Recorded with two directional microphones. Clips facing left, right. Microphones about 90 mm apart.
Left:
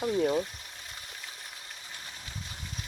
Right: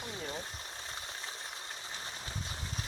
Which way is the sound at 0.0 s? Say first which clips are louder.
Left 14 dB; 65° left (ahead or behind).